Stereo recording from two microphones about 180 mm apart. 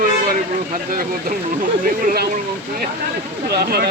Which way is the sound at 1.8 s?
50° right (ahead or behind).